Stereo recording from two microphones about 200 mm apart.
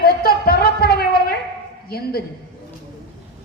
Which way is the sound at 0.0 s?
50° left (ahead or behind).